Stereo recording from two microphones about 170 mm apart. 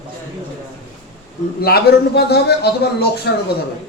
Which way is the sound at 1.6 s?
65° left (ahead or behind).